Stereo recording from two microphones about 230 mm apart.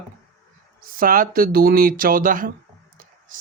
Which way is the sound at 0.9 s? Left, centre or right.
Right.